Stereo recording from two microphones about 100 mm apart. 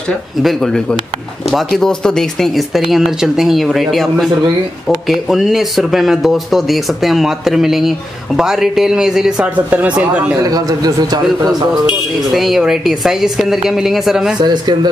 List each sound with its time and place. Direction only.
0.4 s speech: centre (ahead or behind)
9.7 s speech: 15° right (ahead or behind)
10.4 s a man's voice: 40° right (ahead or behind)
12.4 s speech: centre (ahead or behind)
14.4 s speech: 45° right (ahead or behind)